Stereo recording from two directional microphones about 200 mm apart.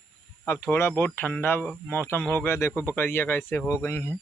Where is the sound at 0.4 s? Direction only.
15° left (ahead or behind).